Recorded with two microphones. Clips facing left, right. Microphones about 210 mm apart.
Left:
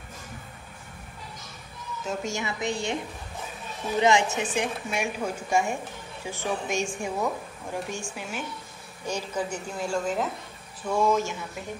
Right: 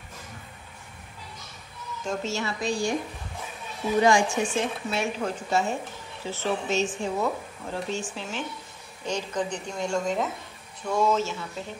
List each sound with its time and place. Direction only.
2.0 s a woman's voice: 15° left (ahead or behind)
4.0 s a woman's voice: 20° left (ahead or behind)